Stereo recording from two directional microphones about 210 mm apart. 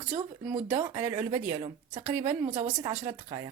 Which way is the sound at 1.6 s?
30° right (ahead or behind).